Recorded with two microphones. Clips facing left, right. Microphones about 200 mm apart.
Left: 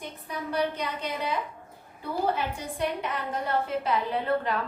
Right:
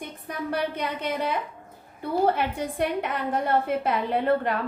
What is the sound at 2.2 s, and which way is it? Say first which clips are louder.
A woman's voice: right 5 dB; 55° right (ahead or behind).